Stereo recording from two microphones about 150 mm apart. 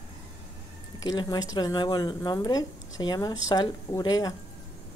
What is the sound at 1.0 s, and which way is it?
Speech, 25° left (ahead or behind).